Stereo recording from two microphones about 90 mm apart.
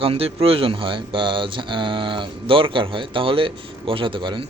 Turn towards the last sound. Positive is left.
turn(degrees=-65)  # may be behind; listen again after turning